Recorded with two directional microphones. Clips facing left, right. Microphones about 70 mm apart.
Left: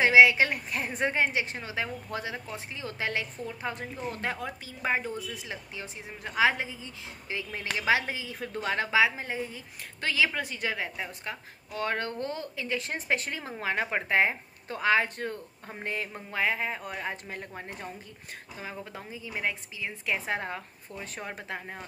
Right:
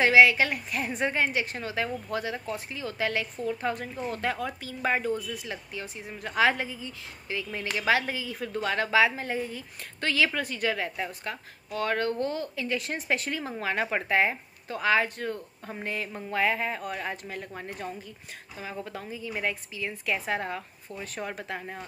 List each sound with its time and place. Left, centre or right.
0.0 s a woman's voice: left
16.3 s a woman's voice: centre
18.6 s a woman's voice: left
20.2 s a woman's voice: left